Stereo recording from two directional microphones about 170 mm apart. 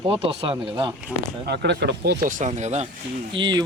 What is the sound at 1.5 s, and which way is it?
Speech, 85° right.